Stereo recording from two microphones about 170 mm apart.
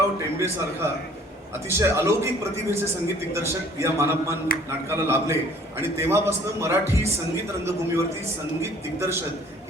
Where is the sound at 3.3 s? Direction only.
15° right (ahead or behind).